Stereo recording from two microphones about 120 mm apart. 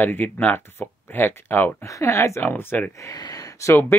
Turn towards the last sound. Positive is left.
turn(degrees=25)  # may be behind; listen again after turning